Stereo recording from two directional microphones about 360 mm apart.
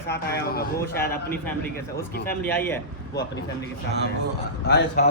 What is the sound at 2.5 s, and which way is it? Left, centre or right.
Speech, centre.